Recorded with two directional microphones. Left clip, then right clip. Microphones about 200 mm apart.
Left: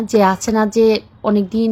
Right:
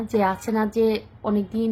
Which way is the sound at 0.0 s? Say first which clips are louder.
Left 8 dB; 30° left (ahead or behind).